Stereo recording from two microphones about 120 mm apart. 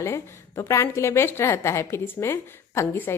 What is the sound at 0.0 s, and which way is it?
A woman's voice, 25° left (ahead or behind).